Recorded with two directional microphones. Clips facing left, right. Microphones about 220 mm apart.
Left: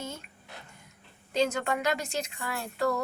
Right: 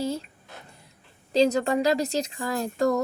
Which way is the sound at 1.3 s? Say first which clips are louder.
Right 7 dB; 35° right (ahead or behind).